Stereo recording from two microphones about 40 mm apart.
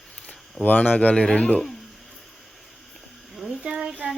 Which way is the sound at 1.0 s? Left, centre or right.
Left.